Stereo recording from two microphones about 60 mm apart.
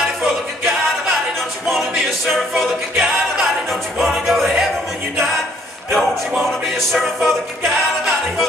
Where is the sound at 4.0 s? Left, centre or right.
Centre.